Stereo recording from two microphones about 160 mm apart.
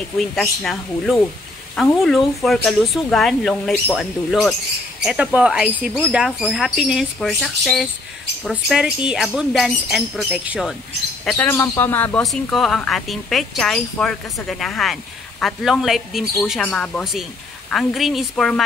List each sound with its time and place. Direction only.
0.2 s speech: centre (ahead or behind)
11.3 s speech: 15° left (ahead or behind)